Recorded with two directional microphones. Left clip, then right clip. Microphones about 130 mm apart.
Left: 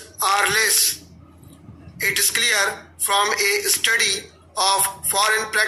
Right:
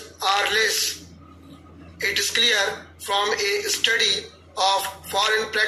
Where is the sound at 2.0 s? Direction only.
40° left (ahead or behind).